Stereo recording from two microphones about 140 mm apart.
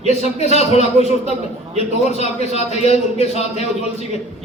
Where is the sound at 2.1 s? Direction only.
50° left (ahead or behind).